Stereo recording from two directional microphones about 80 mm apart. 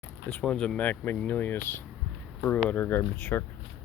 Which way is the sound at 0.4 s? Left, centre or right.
Centre.